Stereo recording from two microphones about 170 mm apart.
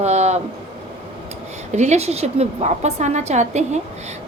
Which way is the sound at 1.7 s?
40° right (ahead or behind).